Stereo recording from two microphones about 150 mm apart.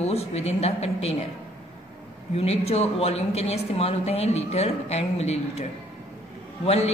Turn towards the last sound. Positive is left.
turn(degrees=45)  # may be behind; listen again after turning